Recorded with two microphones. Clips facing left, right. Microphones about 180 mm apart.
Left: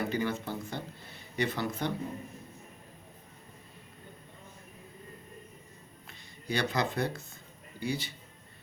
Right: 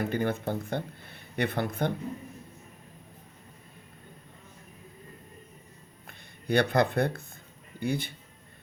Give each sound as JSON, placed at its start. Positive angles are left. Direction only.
{"t": 0.0, "sound": "speech", "side_deg": -55}
{"t": 6.1, "sound": "speech", "side_deg": -55}